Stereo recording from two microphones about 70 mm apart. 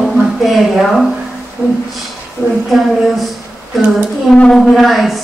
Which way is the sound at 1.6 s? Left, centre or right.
Centre.